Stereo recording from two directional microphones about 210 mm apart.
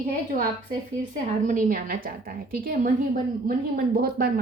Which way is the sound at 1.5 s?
40° right (ahead or behind).